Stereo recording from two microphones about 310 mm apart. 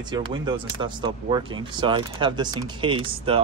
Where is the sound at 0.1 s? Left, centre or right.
Centre.